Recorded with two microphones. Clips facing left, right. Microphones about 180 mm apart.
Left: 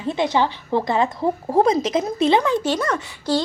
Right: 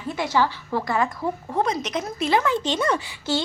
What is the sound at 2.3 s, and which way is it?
Speech, 15° left (ahead or behind).